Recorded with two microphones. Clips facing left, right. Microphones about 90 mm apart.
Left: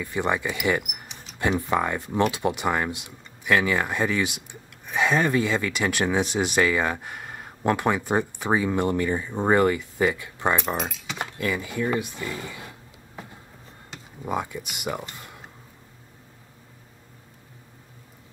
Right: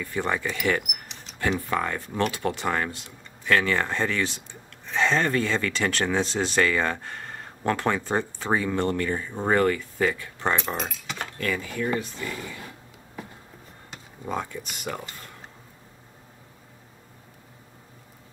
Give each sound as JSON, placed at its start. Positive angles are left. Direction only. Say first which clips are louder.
{"t": 0.0, "sound": "speech", "louder": "left 2 dB", "side_deg": 15}
{"t": 14.2, "sound": "speech", "louder": "left 2 dB", "side_deg": 10}